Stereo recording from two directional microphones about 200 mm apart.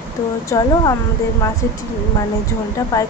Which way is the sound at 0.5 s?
15° left (ahead or behind).